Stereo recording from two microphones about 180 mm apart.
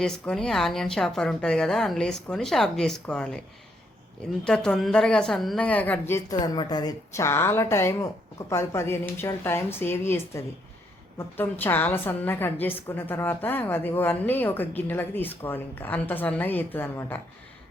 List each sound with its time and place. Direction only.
0.0 s speech: 5° left (ahead or behind)
4.4 s a woman's voice: 5° left (ahead or behind)